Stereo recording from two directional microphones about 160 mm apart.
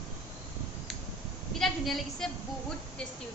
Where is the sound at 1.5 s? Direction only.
Centre (ahead or behind).